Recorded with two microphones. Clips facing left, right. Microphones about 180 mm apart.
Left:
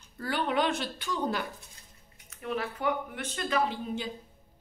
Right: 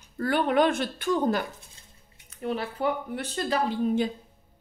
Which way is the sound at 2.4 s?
30° right (ahead or behind).